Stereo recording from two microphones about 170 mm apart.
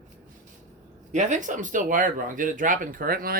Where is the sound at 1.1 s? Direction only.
45° right (ahead or behind).